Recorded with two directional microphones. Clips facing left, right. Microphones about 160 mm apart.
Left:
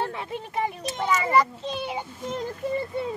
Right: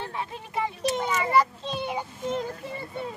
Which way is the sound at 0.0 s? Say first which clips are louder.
Left 3 dB; 60° left (ahead or behind).